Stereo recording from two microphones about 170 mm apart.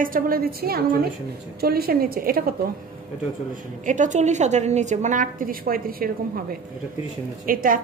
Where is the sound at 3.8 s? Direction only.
45° right (ahead or behind).